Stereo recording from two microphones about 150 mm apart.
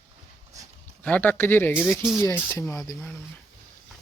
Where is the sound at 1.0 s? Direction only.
10° left (ahead or behind).